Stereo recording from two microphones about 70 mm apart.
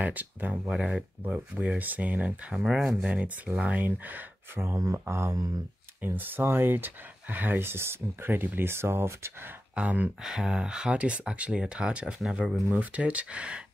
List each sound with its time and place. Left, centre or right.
0.0 s speech: right
0.7 s speech: centre
2.5 s speech: centre
3.0 s speech: centre; by 9.5 s right
9.8 s speech: centre
12.7 s speech: centre